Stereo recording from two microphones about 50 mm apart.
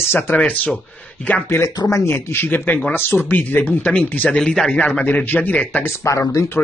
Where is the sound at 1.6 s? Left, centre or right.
Left.